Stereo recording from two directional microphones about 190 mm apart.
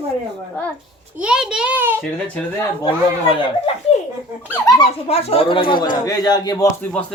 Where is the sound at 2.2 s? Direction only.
5° left (ahead or behind).